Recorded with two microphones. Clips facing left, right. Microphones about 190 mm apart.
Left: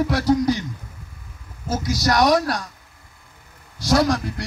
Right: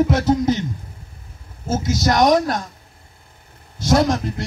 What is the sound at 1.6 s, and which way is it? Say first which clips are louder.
A man's voice: right 3 dB; 25° right (ahead or behind).